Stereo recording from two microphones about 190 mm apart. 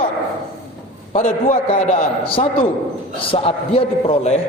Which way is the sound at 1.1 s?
35° left (ahead or behind).